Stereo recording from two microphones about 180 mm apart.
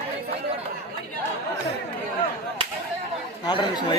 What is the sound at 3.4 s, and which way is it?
Chatter, 25° left (ahead or behind).